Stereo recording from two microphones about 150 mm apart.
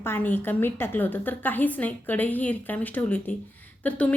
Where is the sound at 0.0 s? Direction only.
15° left (ahead or behind).